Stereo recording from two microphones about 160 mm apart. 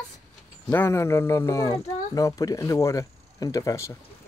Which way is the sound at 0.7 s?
15° left (ahead or behind).